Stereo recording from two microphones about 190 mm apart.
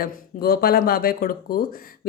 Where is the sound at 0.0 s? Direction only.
55° left (ahead or behind).